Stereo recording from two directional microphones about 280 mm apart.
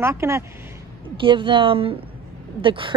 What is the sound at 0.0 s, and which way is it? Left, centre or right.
A woman's voice, centre.